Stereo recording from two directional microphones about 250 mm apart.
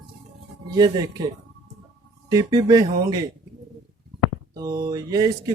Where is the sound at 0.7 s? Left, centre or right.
Centre.